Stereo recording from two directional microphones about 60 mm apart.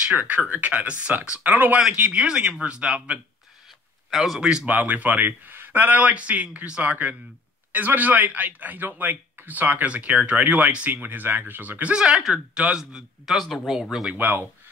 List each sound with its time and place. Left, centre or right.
0.1 s a man's voice: right
4.1 s a man's voice: centre
4.4 s speech: centre
4.6 s a man's voice: right
11.9 s speech: centre
14.1 s speech: right